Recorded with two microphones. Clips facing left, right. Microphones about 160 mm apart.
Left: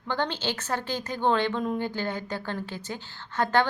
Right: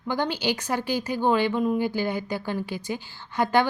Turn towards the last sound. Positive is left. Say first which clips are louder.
# right 2 dB
turn(degrees=-10)  # may be behind; listen again after turning